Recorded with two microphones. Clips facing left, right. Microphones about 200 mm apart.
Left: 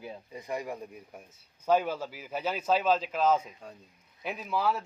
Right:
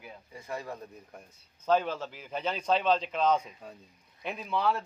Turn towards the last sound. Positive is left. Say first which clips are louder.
# even
turn(degrees=5)  # may be behind; listen again after turning